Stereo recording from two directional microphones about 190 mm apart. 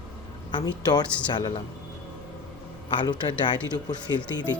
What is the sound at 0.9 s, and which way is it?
Speech, 20° left (ahead or behind).